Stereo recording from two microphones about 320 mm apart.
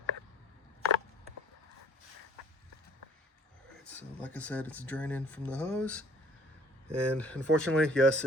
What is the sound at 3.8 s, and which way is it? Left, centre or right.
Speech, centre.